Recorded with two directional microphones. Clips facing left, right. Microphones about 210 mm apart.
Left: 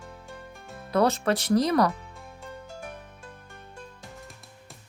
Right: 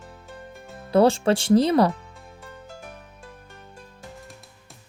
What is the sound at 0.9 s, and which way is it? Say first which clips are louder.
Speech: right 5 dB; 30° right (ahead or behind).